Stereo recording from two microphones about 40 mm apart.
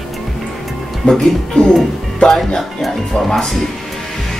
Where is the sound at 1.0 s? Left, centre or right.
Left.